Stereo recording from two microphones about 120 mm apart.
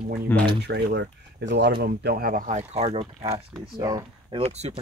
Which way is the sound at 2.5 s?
65° right (ahead or behind).